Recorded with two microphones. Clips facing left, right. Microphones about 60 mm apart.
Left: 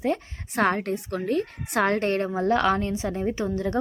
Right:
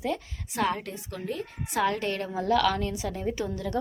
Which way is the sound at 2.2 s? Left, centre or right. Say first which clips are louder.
Right 1 dB; left.